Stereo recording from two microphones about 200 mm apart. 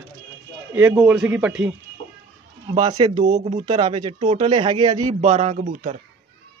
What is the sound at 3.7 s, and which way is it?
Speech, 20° right (ahead or behind).